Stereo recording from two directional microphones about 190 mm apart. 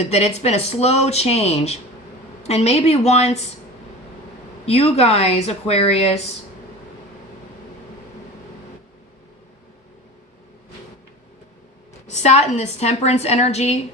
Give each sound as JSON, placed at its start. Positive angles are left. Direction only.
{"t": 0.0, "sound": "speech", "side_deg": 35}
{"t": 4.6, "sound": "speech", "side_deg": 35}
{"t": 12.0, "sound": "speech", "side_deg": 35}